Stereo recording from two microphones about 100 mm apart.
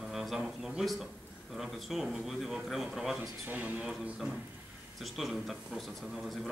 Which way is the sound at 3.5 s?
15° right (ahead or behind).